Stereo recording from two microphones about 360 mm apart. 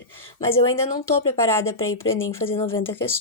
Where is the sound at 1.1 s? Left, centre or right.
Centre.